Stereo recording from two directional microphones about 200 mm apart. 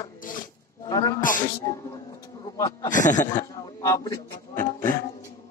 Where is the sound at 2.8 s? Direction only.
40° left (ahead or behind).